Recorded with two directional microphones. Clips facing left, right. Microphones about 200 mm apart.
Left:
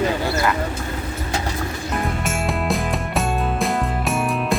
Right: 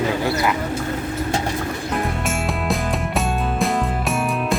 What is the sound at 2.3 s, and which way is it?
Music, centre (ahead or behind).